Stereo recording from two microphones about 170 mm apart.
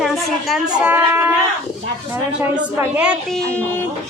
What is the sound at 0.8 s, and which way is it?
Speech, 10° right (ahead or behind).